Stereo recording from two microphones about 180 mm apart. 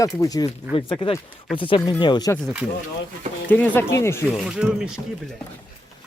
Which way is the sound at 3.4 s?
10° left (ahead or behind).